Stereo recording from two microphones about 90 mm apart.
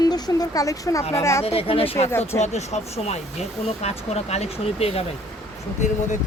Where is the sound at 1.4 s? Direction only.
90° left.